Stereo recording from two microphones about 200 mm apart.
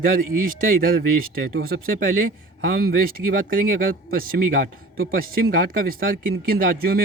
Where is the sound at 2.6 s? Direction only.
50° right (ahead or behind).